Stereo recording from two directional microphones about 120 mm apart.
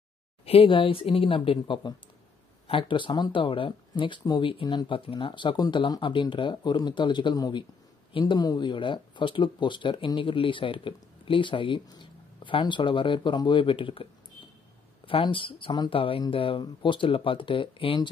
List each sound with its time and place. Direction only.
0.5 s speech: 50° left (ahead or behind)
15.0 s speech: 45° left (ahead or behind)